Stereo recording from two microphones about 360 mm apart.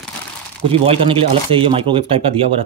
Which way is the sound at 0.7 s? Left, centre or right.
Centre.